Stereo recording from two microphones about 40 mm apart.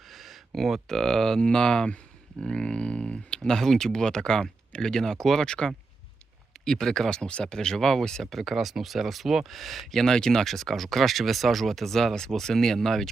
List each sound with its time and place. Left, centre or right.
0.1 s speech: centre
7.1 s speech: left
10.4 s speech: centre